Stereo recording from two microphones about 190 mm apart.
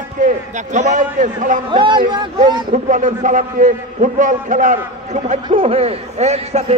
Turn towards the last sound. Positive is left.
turn(degrees=-35)  # may be behind; listen again after turning